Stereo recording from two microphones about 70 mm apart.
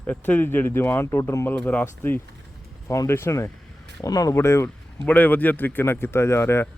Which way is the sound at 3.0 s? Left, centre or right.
Left.